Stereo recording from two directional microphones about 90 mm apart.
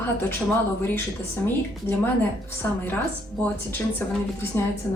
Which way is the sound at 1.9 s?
25° left (ahead or behind).